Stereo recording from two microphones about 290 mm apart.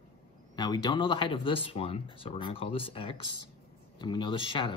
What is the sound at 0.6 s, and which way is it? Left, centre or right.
Speech, centre.